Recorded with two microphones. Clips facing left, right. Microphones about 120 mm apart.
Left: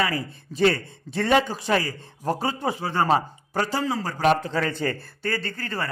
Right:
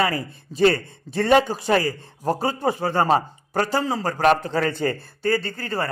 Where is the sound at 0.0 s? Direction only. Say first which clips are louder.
Right 3 dB; 35° right (ahead or behind).